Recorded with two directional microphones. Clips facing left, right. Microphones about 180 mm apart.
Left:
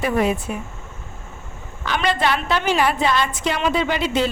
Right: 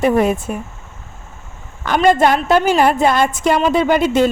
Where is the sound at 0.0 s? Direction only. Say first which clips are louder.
Right 5 dB; 45° right (ahead or behind).